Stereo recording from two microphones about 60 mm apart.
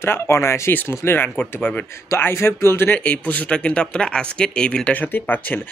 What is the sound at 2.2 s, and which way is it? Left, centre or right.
Speech, left.